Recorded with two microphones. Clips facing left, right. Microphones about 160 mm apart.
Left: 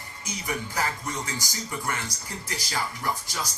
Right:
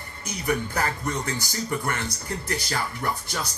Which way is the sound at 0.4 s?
60° right (ahead or behind).